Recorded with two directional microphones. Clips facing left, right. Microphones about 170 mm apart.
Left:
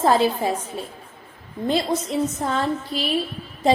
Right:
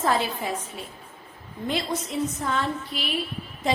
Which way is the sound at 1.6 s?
35° left (ahead or behind).